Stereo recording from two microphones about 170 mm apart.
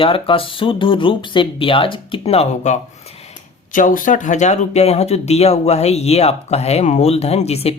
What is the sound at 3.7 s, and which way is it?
Speech, 50° left (ahead or behind).